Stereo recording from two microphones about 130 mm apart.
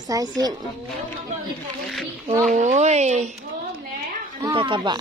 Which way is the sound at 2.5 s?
65° right (ahead or behind).